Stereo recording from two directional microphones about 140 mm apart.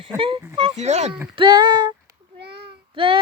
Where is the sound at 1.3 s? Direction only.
35° right (ahead or behind).